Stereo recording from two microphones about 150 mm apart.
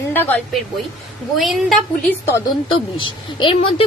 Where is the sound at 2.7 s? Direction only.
35° left (ahead or behind).